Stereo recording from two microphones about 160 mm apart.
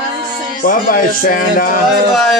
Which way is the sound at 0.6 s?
60° left (ahead or behind).